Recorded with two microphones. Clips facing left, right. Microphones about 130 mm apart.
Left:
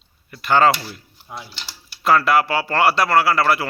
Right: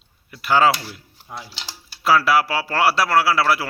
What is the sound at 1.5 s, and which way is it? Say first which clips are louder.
Speech: right 1 dB; 90° right.